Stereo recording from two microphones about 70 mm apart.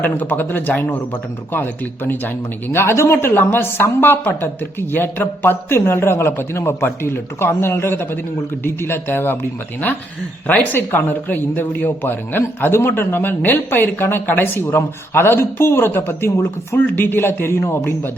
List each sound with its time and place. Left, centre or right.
0.0 s speech: left
2.7 s speech: left